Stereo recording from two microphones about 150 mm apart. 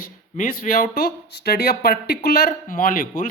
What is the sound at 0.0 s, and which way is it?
Speech, 70° left (ahead or behind).